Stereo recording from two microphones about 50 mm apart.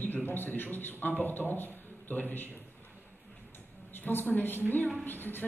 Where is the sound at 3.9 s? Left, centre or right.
Left.